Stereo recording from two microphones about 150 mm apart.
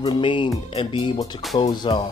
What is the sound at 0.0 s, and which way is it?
Speech, 30° left (ahead or behind).